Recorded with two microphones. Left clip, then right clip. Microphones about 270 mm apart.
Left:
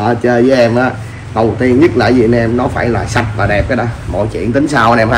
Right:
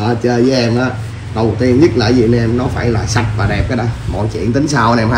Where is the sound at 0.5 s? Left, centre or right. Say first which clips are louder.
Left 5 dB; centre.